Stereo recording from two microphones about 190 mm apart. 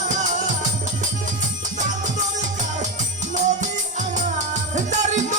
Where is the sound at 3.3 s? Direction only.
40° right (ahead or behind).